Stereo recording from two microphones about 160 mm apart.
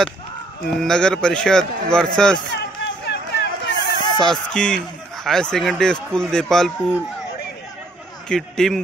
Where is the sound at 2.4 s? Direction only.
90° left.